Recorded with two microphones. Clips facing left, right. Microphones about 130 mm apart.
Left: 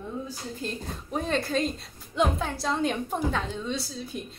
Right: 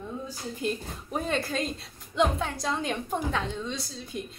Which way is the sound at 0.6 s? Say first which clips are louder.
Right 5 dB; 5° right (ahead or behind).